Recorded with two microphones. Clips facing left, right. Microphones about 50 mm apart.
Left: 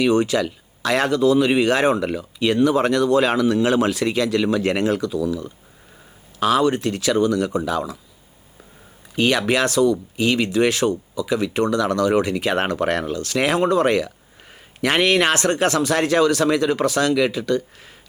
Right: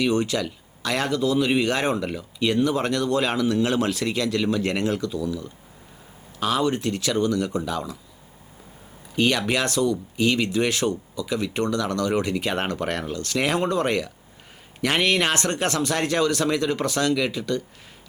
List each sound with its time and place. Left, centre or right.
0.0 s speech: centre
6.4 s speech: left
9.8 s speech: centre
14.8 s a man's voice: centre
15.3 s speech: left